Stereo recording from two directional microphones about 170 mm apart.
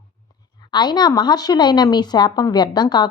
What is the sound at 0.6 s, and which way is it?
Speech, 25° left (ahead or behind).